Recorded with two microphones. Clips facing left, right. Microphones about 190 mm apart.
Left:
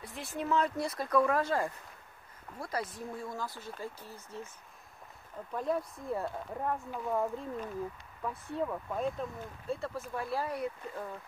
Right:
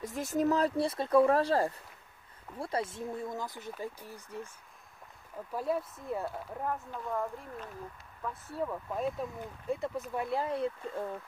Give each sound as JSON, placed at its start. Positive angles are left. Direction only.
{"t": 0.0, "sound": "speech", "side_deg": -40}
{"t": 5.5, "sound": "speech", "side_deg": -5}
{"t": 7.1, "sound": "speech", "side_deg": 15}
{"t": 8.2, "sound": "speech", "side_deg": 0}
{"t": 9.4, "sound": "speech", "side_deg": -15}